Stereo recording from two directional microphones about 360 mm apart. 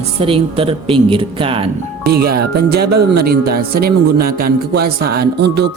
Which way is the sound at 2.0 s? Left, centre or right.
Right.